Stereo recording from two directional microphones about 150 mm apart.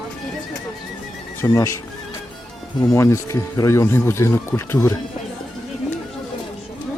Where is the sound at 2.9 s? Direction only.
20° left (ahead or behind).